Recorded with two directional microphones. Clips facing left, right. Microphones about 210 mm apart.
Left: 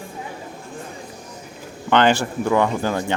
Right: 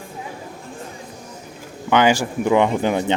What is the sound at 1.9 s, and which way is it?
Speech, 10° right (ahead or behind).